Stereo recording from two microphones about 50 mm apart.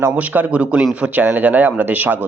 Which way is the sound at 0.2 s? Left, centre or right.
Right.